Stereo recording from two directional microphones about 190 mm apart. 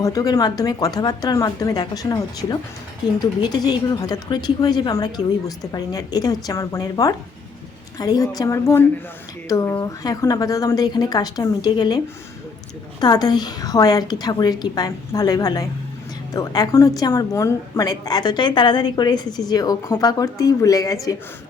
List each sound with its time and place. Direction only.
0.0 s a woman's voice: 20° left (ahead or behind)